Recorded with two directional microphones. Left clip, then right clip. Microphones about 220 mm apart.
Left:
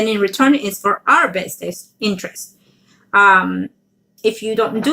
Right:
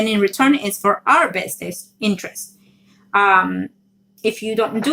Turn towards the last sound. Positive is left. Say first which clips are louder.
# left 2 dB
turn(degrees=-20)  # may be behind; listen again after turning